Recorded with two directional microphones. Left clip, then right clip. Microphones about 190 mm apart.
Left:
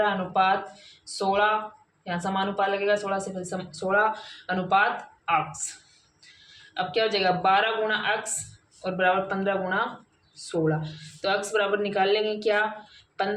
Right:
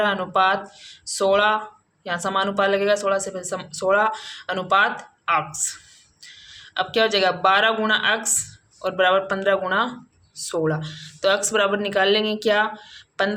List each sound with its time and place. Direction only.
0.0 s speech: 45° right (ahead or behind)
6.7 s speech: 40° right (ahead or behind)